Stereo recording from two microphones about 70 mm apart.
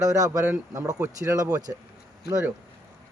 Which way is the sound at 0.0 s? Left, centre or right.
Right.